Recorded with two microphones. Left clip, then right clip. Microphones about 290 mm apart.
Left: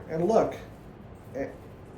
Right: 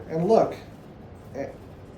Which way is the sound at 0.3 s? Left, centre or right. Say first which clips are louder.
Right 4 dB; right.